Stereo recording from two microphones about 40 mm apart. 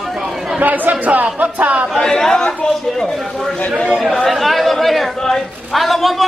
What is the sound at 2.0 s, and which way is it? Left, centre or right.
Speech, centre.